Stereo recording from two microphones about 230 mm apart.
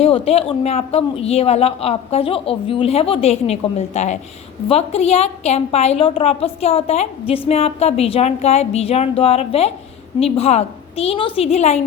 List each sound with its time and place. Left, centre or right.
0.0 s a woman's voice: left